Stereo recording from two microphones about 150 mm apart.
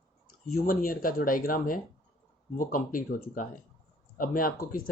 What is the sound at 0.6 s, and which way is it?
Speech, 70° left (ahead or behind).